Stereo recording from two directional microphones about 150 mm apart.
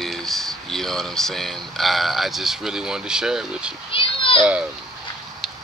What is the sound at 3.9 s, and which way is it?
Children playing, 35° left (ahead or behind).